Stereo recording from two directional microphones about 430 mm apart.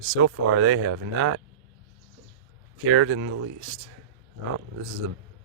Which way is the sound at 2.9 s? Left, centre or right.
Right.